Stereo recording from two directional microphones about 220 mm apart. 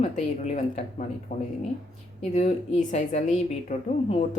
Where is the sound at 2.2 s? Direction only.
30° left (ahead or behind).